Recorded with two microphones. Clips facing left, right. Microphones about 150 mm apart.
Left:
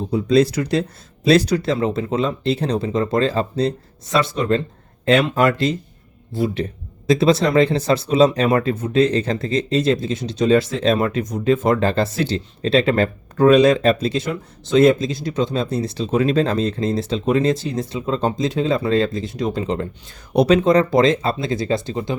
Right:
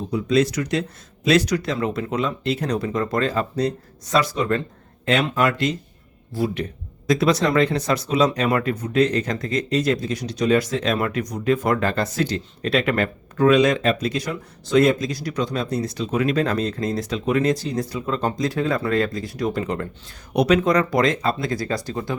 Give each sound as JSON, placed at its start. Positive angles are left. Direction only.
{"t": 0.1, "sound": "speech", "side_deg": 35}